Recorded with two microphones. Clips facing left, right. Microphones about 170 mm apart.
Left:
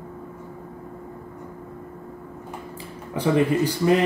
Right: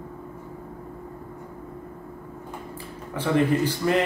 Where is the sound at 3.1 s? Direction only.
15° left (ahead or behind).